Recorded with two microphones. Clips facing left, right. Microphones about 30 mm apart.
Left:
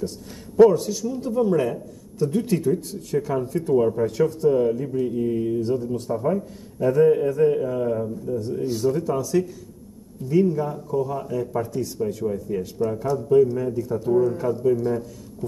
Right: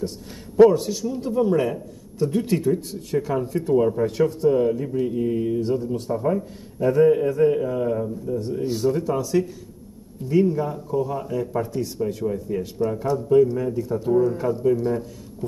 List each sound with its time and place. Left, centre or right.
0.6 s speech: right